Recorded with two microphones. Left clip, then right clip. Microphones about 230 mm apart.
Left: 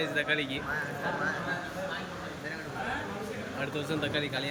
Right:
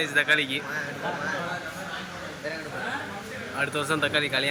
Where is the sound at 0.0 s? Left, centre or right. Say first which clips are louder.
Right 7 dB; centre.